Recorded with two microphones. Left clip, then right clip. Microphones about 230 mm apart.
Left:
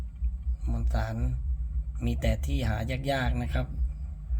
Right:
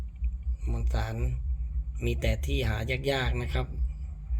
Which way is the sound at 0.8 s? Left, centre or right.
Centre.